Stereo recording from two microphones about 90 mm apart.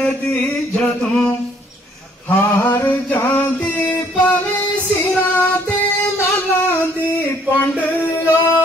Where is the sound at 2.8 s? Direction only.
20° left (ahead or behind).